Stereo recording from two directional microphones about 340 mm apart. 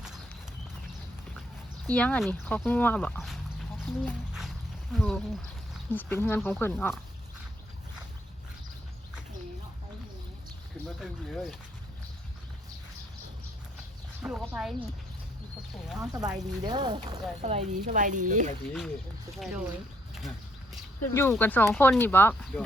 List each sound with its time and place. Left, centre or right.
1.9 s speech: centre
11.0 s speech: centre
14.2 s speech: centre
15.9 s speech: centre
16.6 s speech: centre
19.4 s speech: centre
21.1 s speech: centre